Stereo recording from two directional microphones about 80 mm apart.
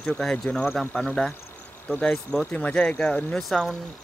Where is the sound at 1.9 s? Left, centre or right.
Left.